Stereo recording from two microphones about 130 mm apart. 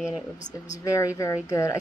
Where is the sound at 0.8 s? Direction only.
25° left (ahead or behind).